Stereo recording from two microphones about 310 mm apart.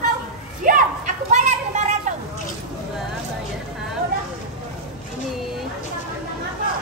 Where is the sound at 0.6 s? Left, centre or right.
Right.